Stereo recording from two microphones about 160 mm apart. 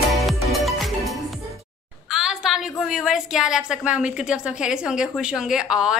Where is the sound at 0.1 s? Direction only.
Centre (ahead or behind).